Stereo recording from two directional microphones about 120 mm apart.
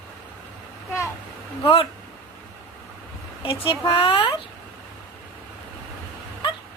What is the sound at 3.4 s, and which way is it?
Speech, 50° left (ahead or behind).